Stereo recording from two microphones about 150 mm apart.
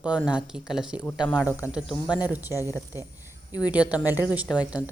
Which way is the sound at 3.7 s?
10° right (ahead or behind).